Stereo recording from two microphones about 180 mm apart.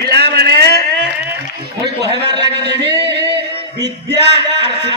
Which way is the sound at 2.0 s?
70° right (ahead or behind).